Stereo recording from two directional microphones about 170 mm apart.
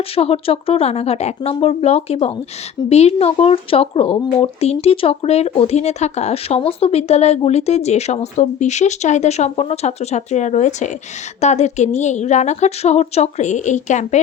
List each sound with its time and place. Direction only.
0.2 s speech: 35° left (ahead or behind)